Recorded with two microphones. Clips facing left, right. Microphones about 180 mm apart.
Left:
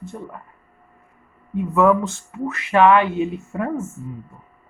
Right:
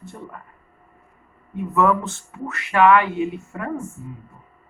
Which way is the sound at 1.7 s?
15° left (ahead or behind).